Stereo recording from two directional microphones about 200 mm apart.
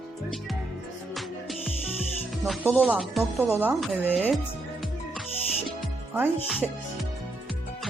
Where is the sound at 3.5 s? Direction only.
10° right (ahead or behind).